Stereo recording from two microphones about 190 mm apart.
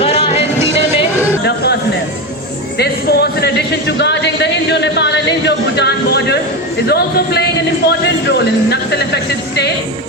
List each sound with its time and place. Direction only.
0.0 s music: 30° left (ahead or behind)
0.4 s music: 15° right (ahead or behind)
2.7 s a sound: 60° left (ahead or behind)
6.8 s speech: 55° left (ahead or behind)